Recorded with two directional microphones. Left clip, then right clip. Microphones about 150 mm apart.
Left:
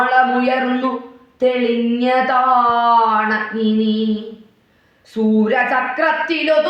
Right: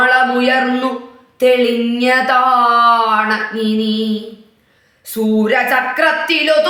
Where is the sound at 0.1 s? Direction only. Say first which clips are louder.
Right 2 dB; 20° right (ahead or behind).